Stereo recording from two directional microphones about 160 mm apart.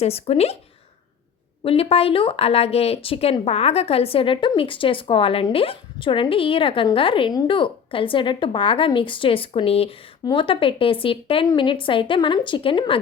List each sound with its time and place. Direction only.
0.0 s speech: 40° left (ahead or behind)
1.6 s speech: 40° left (ahead or behind)